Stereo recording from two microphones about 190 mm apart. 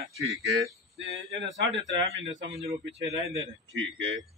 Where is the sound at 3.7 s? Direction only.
85° right.